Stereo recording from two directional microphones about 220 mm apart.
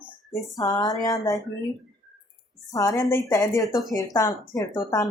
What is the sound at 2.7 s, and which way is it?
Speech, 15° left (ahead or behind).